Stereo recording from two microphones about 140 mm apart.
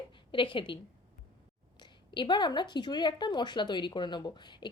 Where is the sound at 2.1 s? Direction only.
35° left (ahead or behind).